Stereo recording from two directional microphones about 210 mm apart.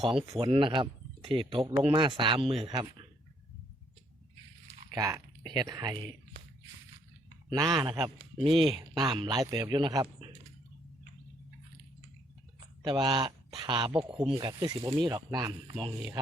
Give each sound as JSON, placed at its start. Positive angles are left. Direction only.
{"t": 0.1, "sound": "a man's voice", "side_deg": -25}
{"t": 4.9, "sound": "speech", "side_deg": -15}
{"t": 7.5, "sound": "a man's voice", "side_deg": -20}
{"t": 12.5, "sound": "a man's voice", "side_deg": -20}